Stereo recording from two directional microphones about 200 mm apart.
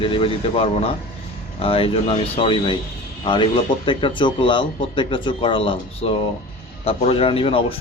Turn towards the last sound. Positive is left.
turn(degrees=25)  # may be behind; listen again after turning